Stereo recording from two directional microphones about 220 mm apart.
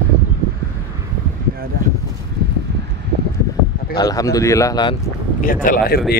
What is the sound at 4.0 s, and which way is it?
Speech, 15° left (ahead or behind).